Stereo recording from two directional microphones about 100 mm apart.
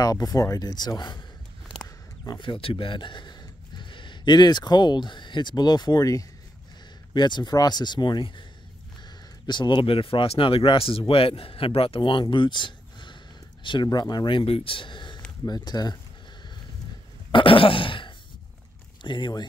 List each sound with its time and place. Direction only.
0.0 s speech: 40° left (ahead or behind)
2.2 s speech: 50° left (ahead or behind)
7.2 s speech: 50° left (ahead or behind)
9.5 s speech: 50° left (ahead or behind)
17.3 s throat clearing: 60° left (ahead or behind)
19.0 s speech: 50° left (ahead or behind)